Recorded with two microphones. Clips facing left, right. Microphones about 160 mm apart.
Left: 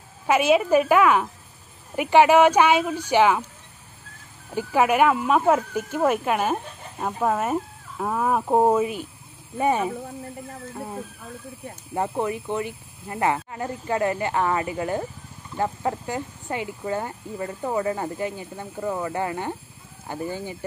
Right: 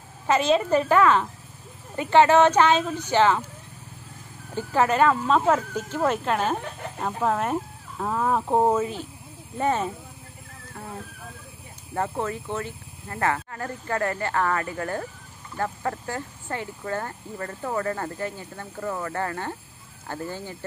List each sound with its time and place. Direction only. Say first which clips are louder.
0.3 s speech: left 2 dB; 10° left (ahead or behind)
4.6 s speech: left 2 dB; 10° left (ahead or behind)
11.9 s speech: left 2 dB; 15° left (ahead or behind)